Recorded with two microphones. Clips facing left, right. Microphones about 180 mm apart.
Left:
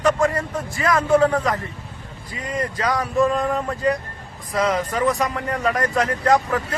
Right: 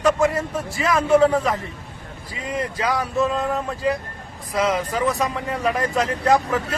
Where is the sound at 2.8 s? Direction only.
5° right (ahead or behind).